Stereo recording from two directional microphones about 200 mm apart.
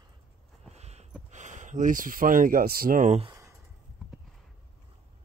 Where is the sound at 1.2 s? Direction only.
35° right (ahead or behind).